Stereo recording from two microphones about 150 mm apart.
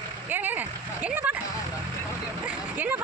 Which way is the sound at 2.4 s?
10° right (ahead or behind).